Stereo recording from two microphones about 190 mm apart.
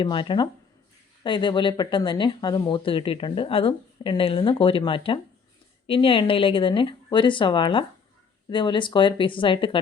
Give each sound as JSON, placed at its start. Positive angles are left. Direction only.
{"t": 0.0, "sound": "speech", "side_deg": 25}